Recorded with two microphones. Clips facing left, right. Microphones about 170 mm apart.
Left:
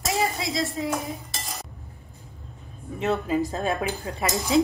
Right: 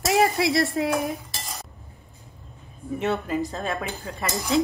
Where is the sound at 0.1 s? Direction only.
65° right (ahead or behind).